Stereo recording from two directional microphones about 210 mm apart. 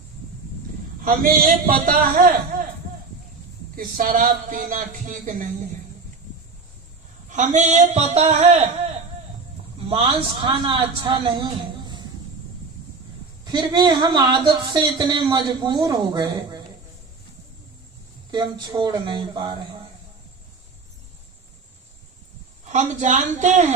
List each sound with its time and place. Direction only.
1.0 s a man's voice: 45° right (ahead or behind)
2.5 s a sound: 40° right (ahead or behind)
3.8 s speech: 40° right (ahead or behind)
7.3 s speech: 35° right (ahead or behind)
9.9 s speech: 25° right (ahead or behind)
13.4 s speech: 20° right (ahead or behind)
18.3 s speech: 20° right (ahead or behind)
22.6 s speech: 35° right (ahead or behind)